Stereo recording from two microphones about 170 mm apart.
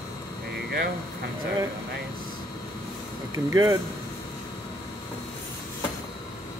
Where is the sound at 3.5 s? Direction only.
20° right (ahead or behind).